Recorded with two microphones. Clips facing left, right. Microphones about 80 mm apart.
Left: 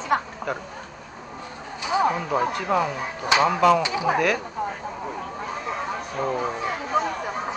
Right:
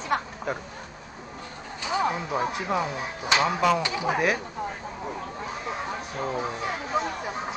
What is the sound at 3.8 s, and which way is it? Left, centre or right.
Speech, centre.